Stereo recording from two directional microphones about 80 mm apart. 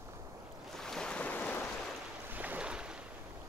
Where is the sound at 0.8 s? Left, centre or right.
Centre.